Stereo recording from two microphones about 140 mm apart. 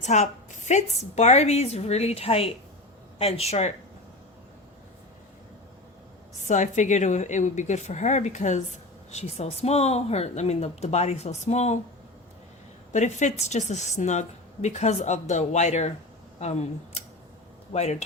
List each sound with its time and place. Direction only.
0.0 s speech: 55° left (ahead or behind)
6.4 s speech: 60° left (ahead or behind)
12.9 s speech: 60° left (ahead or behind)